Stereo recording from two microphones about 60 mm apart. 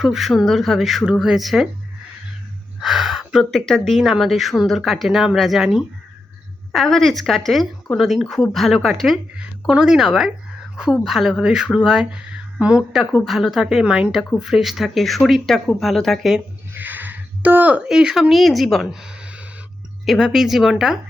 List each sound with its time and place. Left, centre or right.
0.0 s speech: centre
2.8 s gasp: centre
3.5 s speech: centre
6.7 s speech: centre
9.3 s speech: centre
13.1 s speech: centre
16.7 s a sound: right
17.7 s speech: centre
18.9 s a sound: centre
20.1 s speech: centre